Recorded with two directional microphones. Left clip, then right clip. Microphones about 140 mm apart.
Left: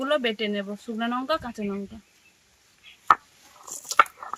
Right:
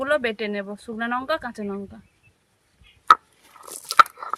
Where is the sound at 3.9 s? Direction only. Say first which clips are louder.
Right 5 dB; 25° right (ahead or behind).